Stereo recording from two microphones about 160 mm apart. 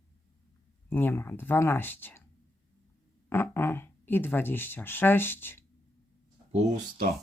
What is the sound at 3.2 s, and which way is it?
Speech, 15° left (ahead or behind).